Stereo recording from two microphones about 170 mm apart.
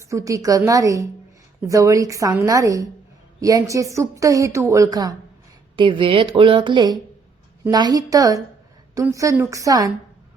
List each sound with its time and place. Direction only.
0.1 s a woman's voice: 20° right (ahead or behind)